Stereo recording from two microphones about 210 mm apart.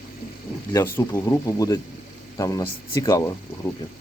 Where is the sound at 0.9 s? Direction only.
15° left (ahead or behind).